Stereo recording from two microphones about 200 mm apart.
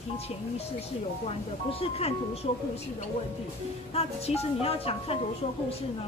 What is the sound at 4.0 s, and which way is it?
A woman's voice, 30° left (ahead or behind).